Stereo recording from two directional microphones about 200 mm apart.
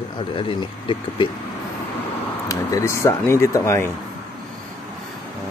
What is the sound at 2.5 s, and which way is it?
Speech, 15° left (ahead or behind).